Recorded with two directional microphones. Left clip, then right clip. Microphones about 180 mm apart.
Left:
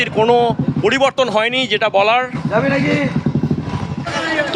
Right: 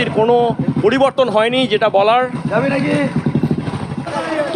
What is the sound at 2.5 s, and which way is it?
Speech, 45° left (ahead or behind).